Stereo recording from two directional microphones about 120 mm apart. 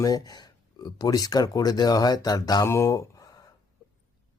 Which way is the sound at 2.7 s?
25° left (ahead or behind).